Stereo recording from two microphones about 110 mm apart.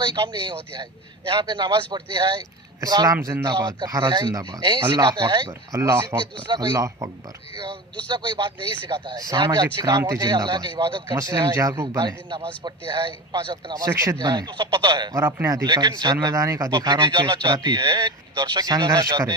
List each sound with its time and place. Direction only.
0.0 s speech: 45° right (ahead or behind)
2.8 s speech: 35° right (ahead or behind)
5.5 s speech: 30° right (ahead or behind)
6.5 s speech: 45° right (ahead or behind)
6.7 s speech: 30° right (ahead or behind)
8.1 s speech: 50° right (ahead or behind)
9.1 s speech: 35° right (ahead or behind)
10.2 s speech: 45° right (ahead or behind)
13.3 s speech: 35° right (ahead or behind)
14.2 s speech: 40° right (ahead or behind)
15.1 s speech: 25° right (ahead or behind)
15.6 s speech: 40° right (ahead or behind)
16.2 s speech: 30° right (ahead or behind)
16.7 s speech: 45° right (ahead or behind)